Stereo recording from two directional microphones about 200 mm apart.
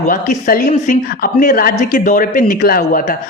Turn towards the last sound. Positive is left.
turn(degrees=45)  # may be behind; listen again after turning